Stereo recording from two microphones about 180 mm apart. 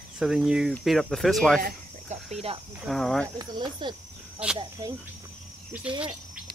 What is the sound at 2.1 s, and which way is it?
Cricket, 35° right (ahead or behind).